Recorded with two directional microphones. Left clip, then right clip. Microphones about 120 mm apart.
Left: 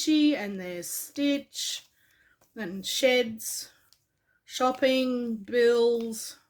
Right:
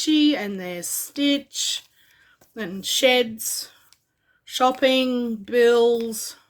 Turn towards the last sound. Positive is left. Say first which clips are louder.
# right 5 dB
turn(degrees=-40)  # may be behind; listen again after turning